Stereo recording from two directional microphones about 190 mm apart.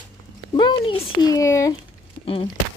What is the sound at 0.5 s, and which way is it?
A woman's voice, 25° left (ahead or behind).